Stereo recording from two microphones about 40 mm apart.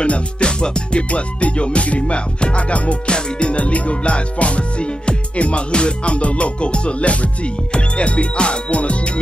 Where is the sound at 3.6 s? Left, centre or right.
Left.